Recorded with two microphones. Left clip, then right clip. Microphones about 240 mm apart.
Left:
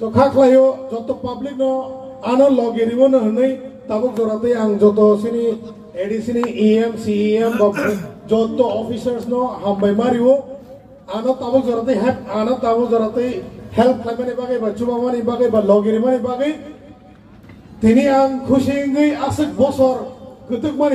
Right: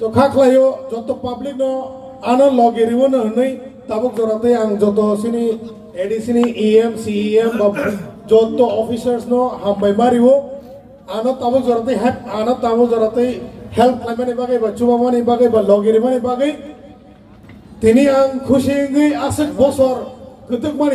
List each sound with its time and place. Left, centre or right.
0.1 s a man's voice: right
7.5 s a sound: centre
8.3 s a man's voice: right
17.7 s a man's voice: right